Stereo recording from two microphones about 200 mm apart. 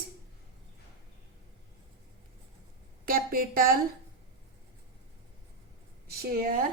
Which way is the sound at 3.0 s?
45° right (ahead or behind).